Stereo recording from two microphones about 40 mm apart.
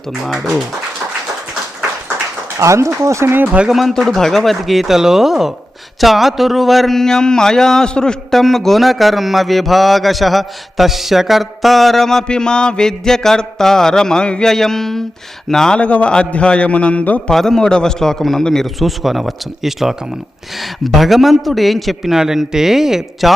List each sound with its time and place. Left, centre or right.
3.4 s speech: right
3.7 s speech: centre
4.0 s speech: centre
6.0 s mantra: centre
7.9 s a man's voice: left
8.3 s speech: centre
12.3 s mantra: left
14.4 s mantra: centre
15.8 s a man's voice: left
17.3 s mantra: centre
18.5 s speech: centre